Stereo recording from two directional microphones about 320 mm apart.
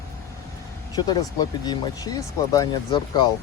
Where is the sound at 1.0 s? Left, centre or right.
Centre.